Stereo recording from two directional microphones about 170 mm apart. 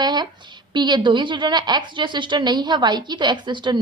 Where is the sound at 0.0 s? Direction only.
25° right (ahead or behind).